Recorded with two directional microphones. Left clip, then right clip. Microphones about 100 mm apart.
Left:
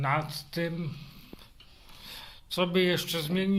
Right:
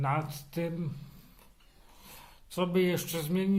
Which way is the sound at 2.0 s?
15° right (ahead or behind).